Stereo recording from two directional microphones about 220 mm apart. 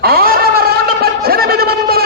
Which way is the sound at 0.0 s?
45° right (ahead or behind).